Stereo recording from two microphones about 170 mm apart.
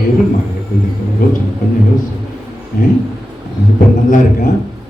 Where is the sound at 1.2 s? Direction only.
55° left (ahead or behind).